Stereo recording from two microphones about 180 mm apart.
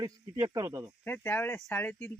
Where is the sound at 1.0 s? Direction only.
15° left (ahead or behind).